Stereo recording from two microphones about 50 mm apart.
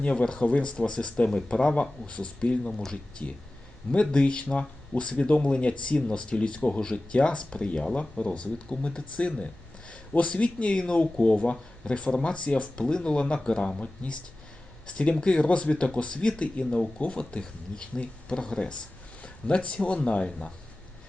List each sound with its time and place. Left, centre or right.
0.0 s speech: left